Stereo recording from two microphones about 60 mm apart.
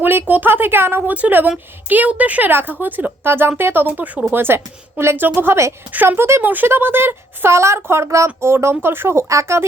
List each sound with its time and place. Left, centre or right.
0.0 s a woman's voice: right
1.0 s a woman's voice: right
4.3 s a woman's voice: right
6.4 s a woman's voice: right